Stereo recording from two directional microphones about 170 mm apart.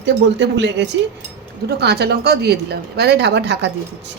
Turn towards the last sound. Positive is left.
turn(degrees=-90)